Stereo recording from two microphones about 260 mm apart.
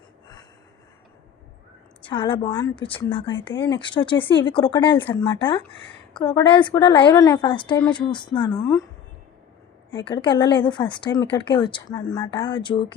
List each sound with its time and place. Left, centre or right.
2.0 s speech: centre
3.4 s a woman's voice: centre
3.8 s a woman's voice: centre
10.0 s a woman's voice: centre